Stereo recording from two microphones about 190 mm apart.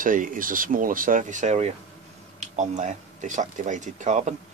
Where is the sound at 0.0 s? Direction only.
45° right (ahead or behind).